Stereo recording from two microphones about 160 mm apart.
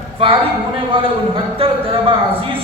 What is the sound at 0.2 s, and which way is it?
Speech, 35° right (ahead or behind).